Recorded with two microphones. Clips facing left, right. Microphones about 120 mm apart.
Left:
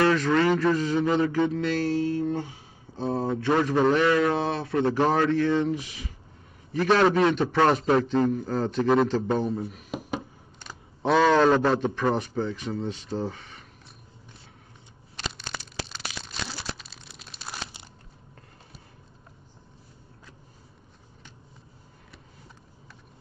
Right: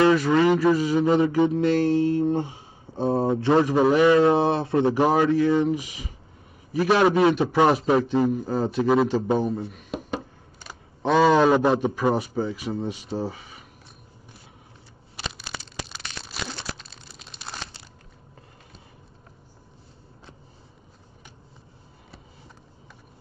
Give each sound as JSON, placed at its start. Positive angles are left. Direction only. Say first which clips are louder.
{"t": 0.0, "sound": "speech", "louder": "right 3 dB", "side_deg": -15}
{"t": 3.6, "sound": "a man's voice", "louder": "right 2 dB", "side_deg": -10}
{"t": 15.1, "sound": "a sound", "louder": "even", "side_deg": -5}